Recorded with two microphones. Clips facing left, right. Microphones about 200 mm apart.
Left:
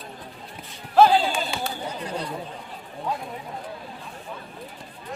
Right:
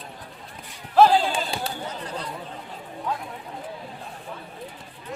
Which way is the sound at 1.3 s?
35° right (ahead or behind).